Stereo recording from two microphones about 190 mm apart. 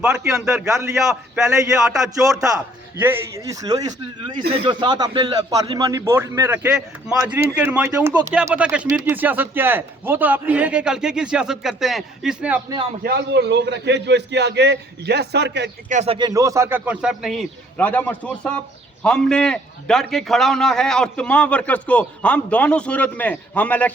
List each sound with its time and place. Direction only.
0.0 s a man's voice: 5° right (ahead or behind)
1.9 s a man's voice: centre (ahead or behind)
3.0 s a man's voice: 15° right (ahead or behind)
13.0 s a man's voice: 60° right (ahead or behind)
15.9 s a man's voice: 40° right (ahead or behind)
16.1 s a man's voice: 20° right (ahead or behind); by 23.9 s 10° left (ahead or behind)